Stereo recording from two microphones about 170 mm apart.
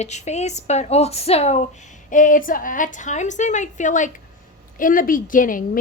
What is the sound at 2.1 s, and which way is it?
A woman's voice, 50° left (ahead or behind).